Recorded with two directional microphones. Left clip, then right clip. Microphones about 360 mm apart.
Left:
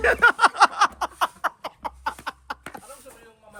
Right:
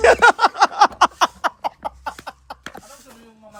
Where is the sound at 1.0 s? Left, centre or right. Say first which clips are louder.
Right 8 dB; right.